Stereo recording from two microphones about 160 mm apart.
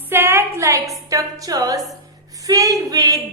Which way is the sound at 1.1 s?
20° right (ahead or behind).